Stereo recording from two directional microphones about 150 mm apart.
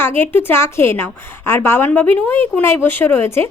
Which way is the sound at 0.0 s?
15° left (ahead or behind).